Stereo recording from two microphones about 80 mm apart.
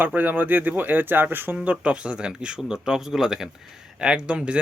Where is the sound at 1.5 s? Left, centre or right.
Centre.